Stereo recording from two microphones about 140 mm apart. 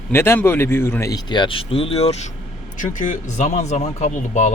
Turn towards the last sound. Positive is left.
turn(degrees=55)  # may be behind; listen again after turning